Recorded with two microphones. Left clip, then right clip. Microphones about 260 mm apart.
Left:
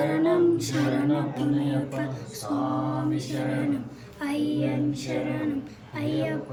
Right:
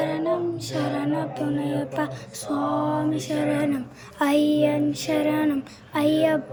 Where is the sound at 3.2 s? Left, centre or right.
Centre.